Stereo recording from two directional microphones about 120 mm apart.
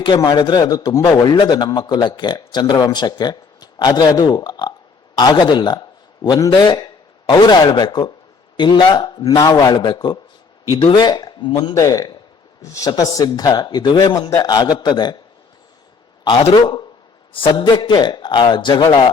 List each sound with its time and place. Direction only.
0.2 s a man's voice: 35° left (ahead or behind)
14.1 s a man's voice: 25° left (ahead or behind)
16.5 s a man's voice: 40° left (ahead or behind)